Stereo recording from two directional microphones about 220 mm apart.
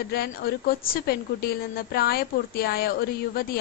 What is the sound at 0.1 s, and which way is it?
Speech, 45° left (ahead or behind).